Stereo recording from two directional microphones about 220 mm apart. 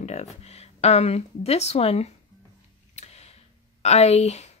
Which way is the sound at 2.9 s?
30° left (ahead or behind).